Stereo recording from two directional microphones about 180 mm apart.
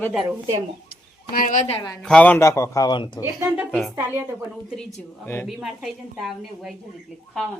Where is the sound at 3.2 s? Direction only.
10° right (ahead or behind).